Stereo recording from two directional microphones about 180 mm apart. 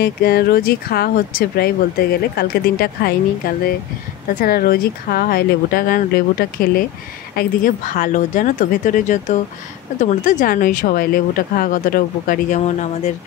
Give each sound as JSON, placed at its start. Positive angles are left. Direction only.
{"t": 0.0, "sound": "speech", "side_deg": 60}